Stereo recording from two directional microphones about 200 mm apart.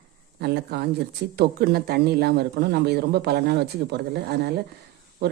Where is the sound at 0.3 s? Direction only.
55° right (ahead or behind).